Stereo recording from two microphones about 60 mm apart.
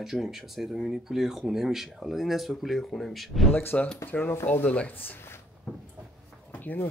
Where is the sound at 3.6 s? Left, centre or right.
Left.